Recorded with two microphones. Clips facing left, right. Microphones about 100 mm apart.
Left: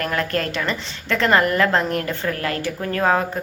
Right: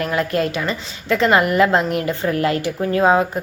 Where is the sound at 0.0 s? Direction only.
15° right (ahead or behind).